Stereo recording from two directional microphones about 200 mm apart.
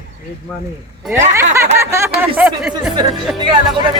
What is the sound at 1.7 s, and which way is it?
Snicker, 15° right (ahead or behind).